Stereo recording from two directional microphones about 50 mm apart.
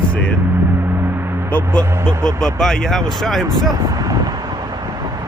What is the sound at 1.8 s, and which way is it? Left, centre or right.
Speech, right.